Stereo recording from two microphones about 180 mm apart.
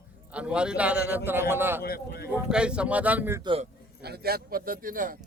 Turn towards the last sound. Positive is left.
turn(degrees=-50)  # may be behind; listen again after turning